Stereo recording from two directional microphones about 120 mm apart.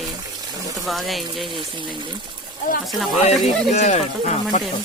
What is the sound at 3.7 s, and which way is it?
Speech, 75° left (ahead or behind).